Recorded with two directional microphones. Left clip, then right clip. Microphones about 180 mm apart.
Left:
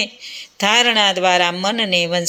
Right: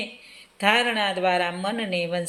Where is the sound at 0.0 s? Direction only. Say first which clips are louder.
Left 11 dB; 25° left (ahead or behind).